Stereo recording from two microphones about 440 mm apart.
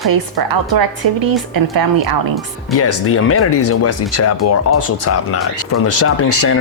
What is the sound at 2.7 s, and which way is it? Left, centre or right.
Speech, left.